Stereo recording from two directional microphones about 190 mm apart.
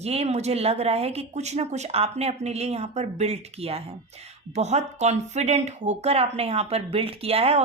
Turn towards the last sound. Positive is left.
turn(degrees=-30)  # may be behind; listen again after turning